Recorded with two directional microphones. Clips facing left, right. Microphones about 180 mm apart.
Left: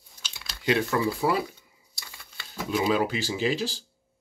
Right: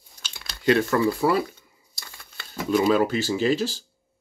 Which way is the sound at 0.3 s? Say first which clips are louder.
Right 2 dB; 5° left (ahead or behind).